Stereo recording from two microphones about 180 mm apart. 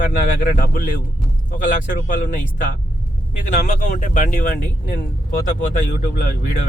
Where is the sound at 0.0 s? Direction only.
50° left (ahead or behind).